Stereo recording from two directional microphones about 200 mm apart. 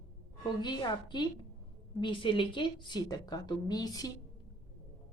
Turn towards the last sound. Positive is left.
turn(degrees=20)  # may be behind; listen again after turning